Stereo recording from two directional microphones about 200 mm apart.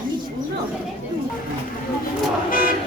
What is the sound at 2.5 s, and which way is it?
Vehicle, 45° left (ahead or behind).